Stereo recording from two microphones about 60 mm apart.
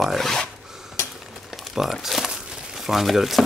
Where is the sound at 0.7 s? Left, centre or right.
Centre.